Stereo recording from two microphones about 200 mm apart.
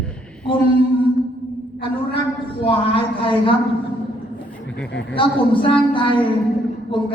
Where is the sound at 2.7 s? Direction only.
25° left (ahead or behind).